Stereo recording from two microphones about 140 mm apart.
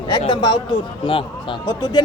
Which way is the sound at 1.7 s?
30° left (ahead or behind).